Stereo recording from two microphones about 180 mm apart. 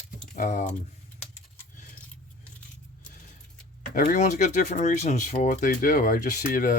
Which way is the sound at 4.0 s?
45° left (ahead or behind).